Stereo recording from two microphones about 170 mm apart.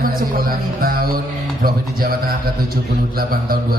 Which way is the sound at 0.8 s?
60° right (ahead or behind).